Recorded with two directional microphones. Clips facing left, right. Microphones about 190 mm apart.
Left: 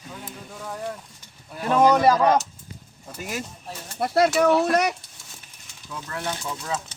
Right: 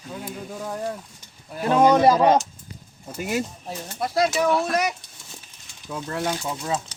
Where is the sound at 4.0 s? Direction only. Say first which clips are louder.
Left 3 dB; 65° left (ahead or behind).